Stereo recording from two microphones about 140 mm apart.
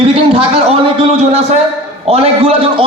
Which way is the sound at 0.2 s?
40° right (ahead or behind).